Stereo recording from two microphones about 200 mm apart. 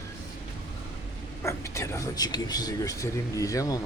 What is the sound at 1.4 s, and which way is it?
Speech, 15° left (ahead or behind).